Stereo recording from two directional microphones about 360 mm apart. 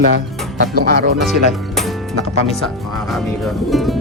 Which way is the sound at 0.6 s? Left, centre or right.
Right.